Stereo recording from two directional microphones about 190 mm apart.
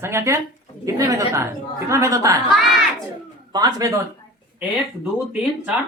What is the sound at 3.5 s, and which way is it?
Speech, 20° right (ahead or behind).